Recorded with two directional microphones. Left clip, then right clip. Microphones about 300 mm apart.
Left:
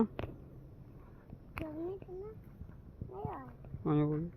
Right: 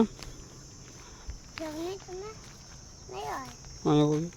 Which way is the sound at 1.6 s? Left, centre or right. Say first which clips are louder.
Right 6 dB; left.